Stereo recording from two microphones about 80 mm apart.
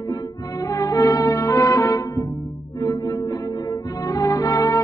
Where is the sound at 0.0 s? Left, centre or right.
Left.